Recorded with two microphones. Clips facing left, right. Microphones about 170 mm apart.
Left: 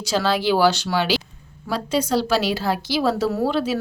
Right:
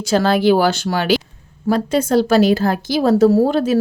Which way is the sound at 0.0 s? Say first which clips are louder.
Right 6 dB; 50° right (ahead or behind).